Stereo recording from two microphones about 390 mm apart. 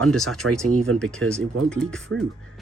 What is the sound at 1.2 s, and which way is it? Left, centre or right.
Speech, right.